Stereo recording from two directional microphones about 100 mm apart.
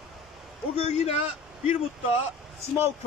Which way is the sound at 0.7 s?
90° left.